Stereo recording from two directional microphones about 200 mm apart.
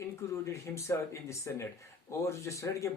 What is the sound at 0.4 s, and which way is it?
Speech, 15° left (ahead or behind).